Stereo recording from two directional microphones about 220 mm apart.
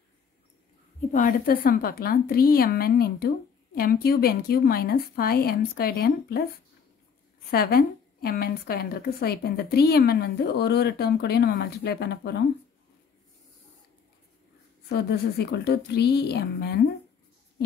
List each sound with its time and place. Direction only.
1.1 s a woman's voice: 40° left (ahead or behind)
7.5 s a woman's voice: 45° left (ahead or behind)
14.9 s a woman's voice: 45° left (ahead or behind)